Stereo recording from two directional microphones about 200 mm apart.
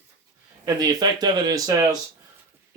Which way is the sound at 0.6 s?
20° right (ahead or behind).